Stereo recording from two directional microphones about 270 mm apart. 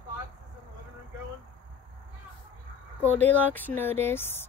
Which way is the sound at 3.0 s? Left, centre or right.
Centre.